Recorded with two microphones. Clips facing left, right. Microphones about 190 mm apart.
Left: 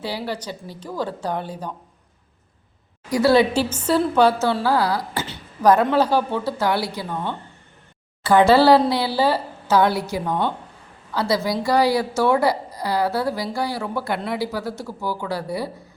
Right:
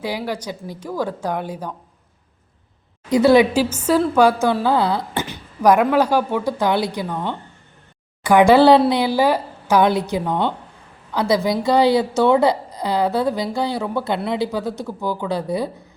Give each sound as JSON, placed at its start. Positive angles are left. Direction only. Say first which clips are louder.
{"t": 0.0, "sound": "speech", "louder": "right 3 dB", "side_deg": -15}
{"t": 3.1, "sound": "a woman's voice", "louder": "right 3 dB", "side_deg": -20}
{"t": 3.5, "sound": "speech", "louder": "right 3 dB", "side_deg": -10}
{"t": 5.2, "sound": "a woman's voice", "louder": "right 1 dB", "side_deg": -10}